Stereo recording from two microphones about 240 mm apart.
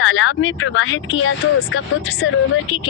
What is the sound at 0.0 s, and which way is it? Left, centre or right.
Speech, left.